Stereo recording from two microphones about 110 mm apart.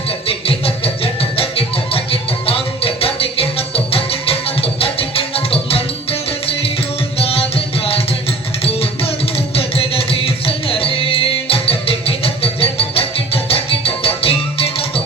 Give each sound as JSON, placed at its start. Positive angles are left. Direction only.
{"t": 0.3, "sound": "music", "side_deg": 60}
{"t": 7.2, "sound": "music", "side_deg": 60}
{"t": 9.6, "sound": "music", "side_deg": 60}